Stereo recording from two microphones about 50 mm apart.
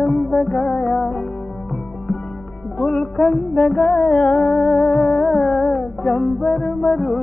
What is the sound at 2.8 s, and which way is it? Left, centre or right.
Music, centre.